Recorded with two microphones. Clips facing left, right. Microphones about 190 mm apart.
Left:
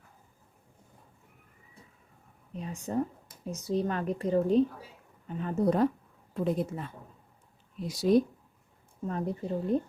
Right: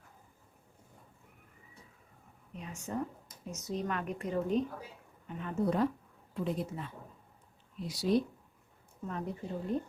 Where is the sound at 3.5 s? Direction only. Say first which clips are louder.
Left 6 dB; 35° left (ahead or behind).